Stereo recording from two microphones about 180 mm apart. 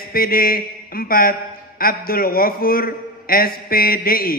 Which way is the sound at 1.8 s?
55° left (ahead or behind).